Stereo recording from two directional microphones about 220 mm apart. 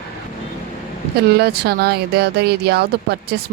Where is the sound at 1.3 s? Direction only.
45° right (ahead or behind).